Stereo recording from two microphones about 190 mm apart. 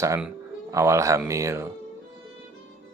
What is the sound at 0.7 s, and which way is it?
Speech, 15° right (ahead or behind).